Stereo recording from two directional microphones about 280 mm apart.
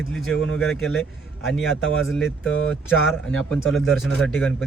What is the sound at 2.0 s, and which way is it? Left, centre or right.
Speech, centre.